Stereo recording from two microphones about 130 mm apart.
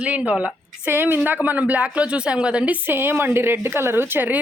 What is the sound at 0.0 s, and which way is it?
Speech, 10° right (ahead or behind).